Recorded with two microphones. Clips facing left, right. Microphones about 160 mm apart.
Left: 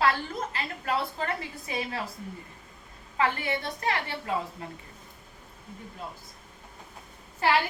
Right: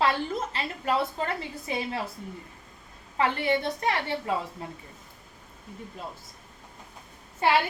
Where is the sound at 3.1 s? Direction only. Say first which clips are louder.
Right 3 dB; 25° right (ahead or behind).